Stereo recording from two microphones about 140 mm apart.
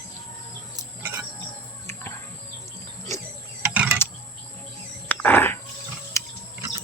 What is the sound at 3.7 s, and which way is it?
Vehicle, 10° right (ahead or behind).